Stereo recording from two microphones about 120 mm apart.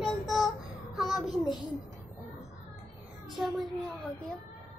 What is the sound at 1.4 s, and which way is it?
Speech, 35° left (ahead or behind).